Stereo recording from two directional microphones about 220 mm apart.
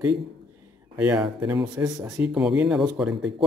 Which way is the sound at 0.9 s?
5° right (ahead or behind).